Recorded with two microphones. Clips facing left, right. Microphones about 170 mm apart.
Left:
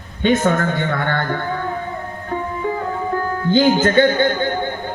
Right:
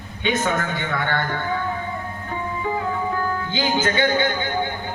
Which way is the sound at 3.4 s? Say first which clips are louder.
Left 11 dB; 50° left (ahead or behind).